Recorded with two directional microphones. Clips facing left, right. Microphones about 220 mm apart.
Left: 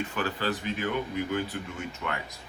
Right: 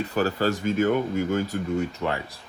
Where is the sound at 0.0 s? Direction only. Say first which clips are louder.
Right 7 dB; 40° right (ahead or behind).